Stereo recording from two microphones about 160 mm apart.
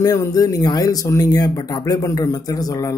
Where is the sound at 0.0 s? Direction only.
20° left (ahead or behind).